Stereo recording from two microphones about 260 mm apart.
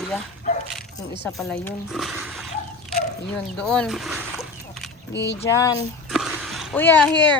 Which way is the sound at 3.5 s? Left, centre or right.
Centre.